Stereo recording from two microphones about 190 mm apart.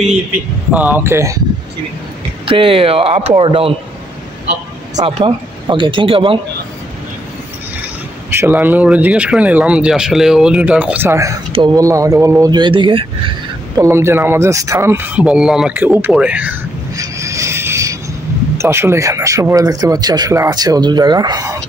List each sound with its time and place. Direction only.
0.7 s speech: 10° right (ahead or behind)
2.4 s speech: 30° right (ahead or behind)
4.9 s speech: 25° right (ahead or behind)
8.3 s speech: 10° right (ahead or behind); by 13.3 s 25° right (ahead or behind)
13.7 s speech: 15° right (ahead or behind)
16.9 s a sound: 15° right (ahead or behind)
18.6 s speech: 15° right (ahead or behind)